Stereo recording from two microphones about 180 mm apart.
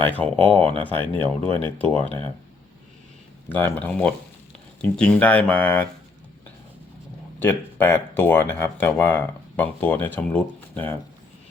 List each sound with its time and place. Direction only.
0.2 s speech: 5° left (ahead or behind)
0.5 s speech: 30° right (ahead or behind)
3.5 s speech: 10° left (ahead or behind)
7.3 s speech: 10° left (ahead or behind)